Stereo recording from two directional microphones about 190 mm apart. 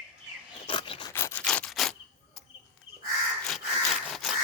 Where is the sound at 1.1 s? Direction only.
10° left (ahead or behind).